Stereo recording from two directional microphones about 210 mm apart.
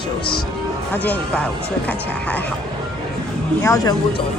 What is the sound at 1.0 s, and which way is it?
Speech, 5° left (ahead or behind).